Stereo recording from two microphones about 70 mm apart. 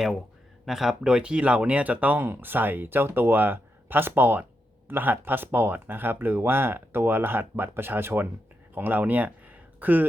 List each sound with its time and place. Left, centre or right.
0.6 s speech: centre; by 10.1 s right